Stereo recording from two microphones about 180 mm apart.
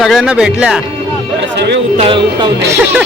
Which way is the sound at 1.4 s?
75° right (ahead or behind).